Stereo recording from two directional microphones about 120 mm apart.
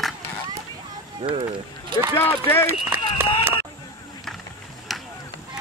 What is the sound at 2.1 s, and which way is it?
Speech, 20° left (ahead or behind).